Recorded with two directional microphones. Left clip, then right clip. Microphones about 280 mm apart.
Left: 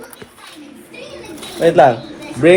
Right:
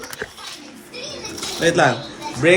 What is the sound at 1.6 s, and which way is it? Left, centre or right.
Music, centre.